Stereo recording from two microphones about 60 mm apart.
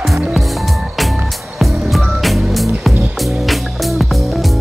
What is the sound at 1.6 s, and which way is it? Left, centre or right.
Music, centre.